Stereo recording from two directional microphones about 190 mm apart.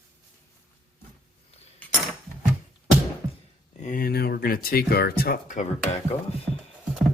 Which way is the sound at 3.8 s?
45° left (ahead or behind).